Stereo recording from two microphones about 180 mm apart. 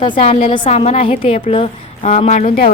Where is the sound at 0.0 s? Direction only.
30° left (ahead or behind).